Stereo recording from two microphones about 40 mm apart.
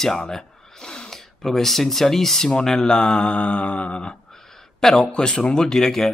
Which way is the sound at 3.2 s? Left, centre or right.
Left.